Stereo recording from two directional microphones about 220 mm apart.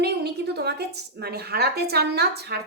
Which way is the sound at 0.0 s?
50° right (ahead or behind).